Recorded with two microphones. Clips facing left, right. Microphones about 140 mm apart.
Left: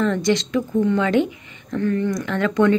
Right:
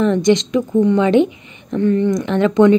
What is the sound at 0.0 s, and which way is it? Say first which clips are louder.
A woman's voice: right 5 dB; 20° right (ahead or behind).